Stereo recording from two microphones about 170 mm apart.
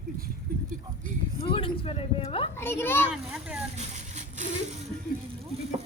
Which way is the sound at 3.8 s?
45° right (ahead or behind).